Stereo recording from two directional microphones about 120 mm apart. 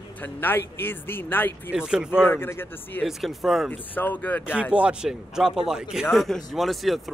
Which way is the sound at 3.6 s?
15° left (ahead or behind).